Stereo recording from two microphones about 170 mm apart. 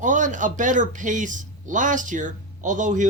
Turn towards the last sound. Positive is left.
turn(degrees=-50)  # may be behind; listen again after turning